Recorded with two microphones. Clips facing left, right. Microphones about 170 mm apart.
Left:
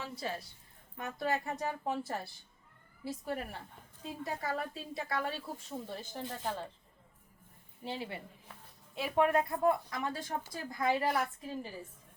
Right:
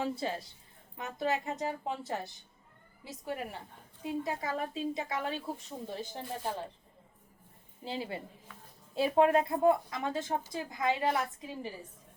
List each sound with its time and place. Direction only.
0.0 s a woman's voice: 25° right (ahead or behind)
7.9 s a woman's voice: 25° right (ahead or behind)